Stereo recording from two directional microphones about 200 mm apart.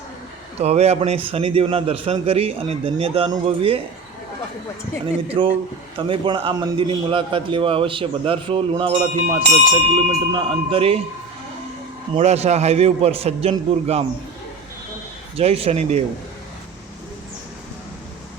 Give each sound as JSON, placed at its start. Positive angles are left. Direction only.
{"t": 0.6, "sound": "a man's voice", "side_deg": -30}
{"t": 5.4, "sound": "a man's voice", "side_deg": -25}
{"t": 12.1, "sound": "a man's voice", "side_deg": -35}
{"t": 15.4, "sound": "a man's voice", "side_deg": -30}